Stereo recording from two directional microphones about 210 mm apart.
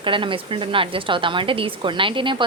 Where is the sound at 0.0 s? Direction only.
25° right (ahead or behind).